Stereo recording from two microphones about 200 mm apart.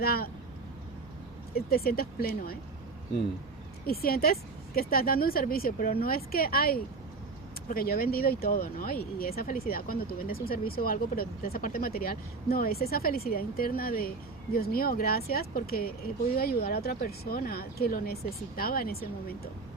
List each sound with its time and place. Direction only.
0.0 s speech: 50° left (ahead or behind)
1.5 s speech: 50° left (ahead or behind)
3.8 s speech: 50° left (ahead or behind)